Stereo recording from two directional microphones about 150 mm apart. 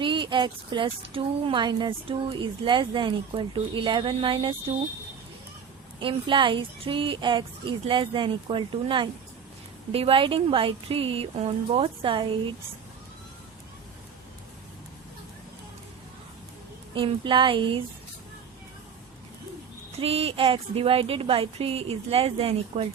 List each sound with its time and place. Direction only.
0.0 s a woman's voice: 35° right (ahead or behind)
6.0 s a woman's voice: 35° right (ahead or behind)
16.9 s a woman's voice: 35° right (ahead or behind)
20.0 s a woman's voice: 40° right (ahead or behind)